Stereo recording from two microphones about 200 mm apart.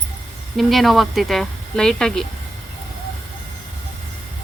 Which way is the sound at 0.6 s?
Centre (ahead or behind).